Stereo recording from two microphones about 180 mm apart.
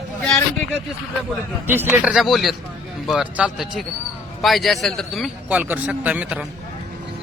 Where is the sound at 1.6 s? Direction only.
10° right (ahead or behind).